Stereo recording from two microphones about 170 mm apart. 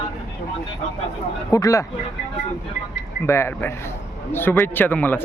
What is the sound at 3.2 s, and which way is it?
Speech, 15° left (ahead or behind).